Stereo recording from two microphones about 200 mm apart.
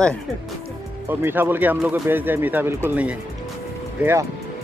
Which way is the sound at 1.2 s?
10° right (ahead or behind).